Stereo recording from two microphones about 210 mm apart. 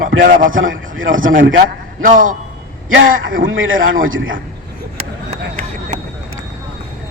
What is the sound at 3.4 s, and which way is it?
Speech, 70° right (ahead or behind).